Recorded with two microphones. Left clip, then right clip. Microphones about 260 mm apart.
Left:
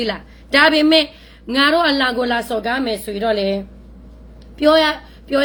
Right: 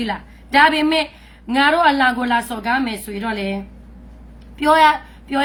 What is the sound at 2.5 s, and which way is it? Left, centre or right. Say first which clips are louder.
Speech: left 1 dB; left.